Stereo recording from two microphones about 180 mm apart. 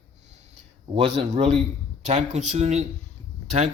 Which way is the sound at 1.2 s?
40° right (ahead or behind).